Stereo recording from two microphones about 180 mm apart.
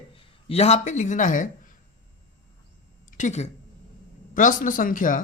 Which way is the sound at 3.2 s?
40° left (ahead or behind).